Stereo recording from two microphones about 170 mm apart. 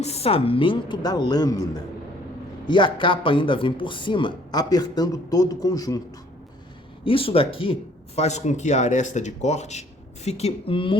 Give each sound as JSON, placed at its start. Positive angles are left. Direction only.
{"t": 0.0, "sound": "speech", "side_deg": 35}
{"t": 7.0, "sound": "speech", "side_deg": 30}